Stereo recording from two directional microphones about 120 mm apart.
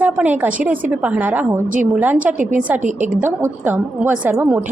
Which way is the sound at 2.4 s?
90° right.